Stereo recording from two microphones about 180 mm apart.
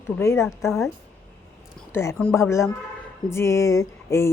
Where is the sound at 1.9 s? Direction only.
15° left (ahead or behind).